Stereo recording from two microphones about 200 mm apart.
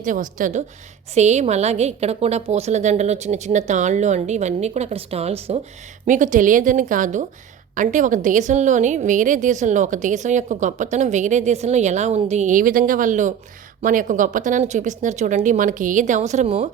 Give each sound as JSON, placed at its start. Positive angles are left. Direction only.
{"t": 0.0, "sound": "a woman's voice", "side_deg": -40}